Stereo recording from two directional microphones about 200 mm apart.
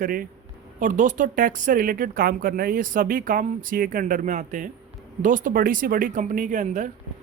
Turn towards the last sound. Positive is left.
turn(degrees=-40)  # may be behind; listen again after turning